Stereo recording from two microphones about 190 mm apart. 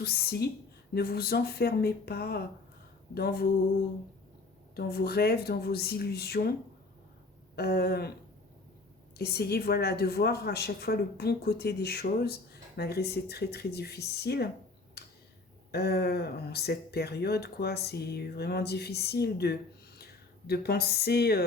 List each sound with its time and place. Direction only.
0.0 s a woman's voice: 55° left (ahead or behind)
4.7 s a woman's voice: 55° left (ahead or behind)
7.5 s a woman's voice: 55° left (ahead or behind)
9.1 s a woman's voice: 55° left (ahead or behind)
15.0 s tick-tock: 60° left (ahead or behind)
15.7 s a woman's voice: 60° left (ahead or behind)